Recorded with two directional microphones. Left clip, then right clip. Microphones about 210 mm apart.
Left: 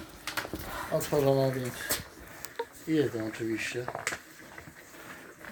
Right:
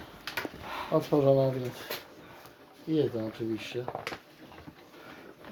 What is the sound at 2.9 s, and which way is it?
Speech, 10° right (ahead or behind).